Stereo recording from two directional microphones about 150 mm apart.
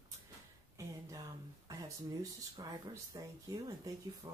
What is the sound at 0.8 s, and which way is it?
Speech, 20° right (ahead or behind).